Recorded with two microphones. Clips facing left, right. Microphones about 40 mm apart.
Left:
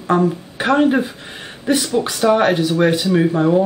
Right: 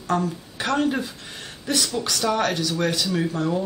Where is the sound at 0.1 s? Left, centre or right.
Left.